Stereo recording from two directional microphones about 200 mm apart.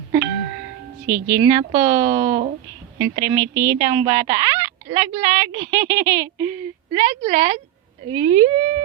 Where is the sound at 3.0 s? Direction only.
15° right (ahead or behind).